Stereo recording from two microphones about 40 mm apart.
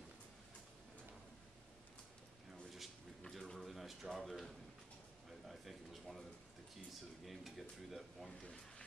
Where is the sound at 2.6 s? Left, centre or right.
Centre.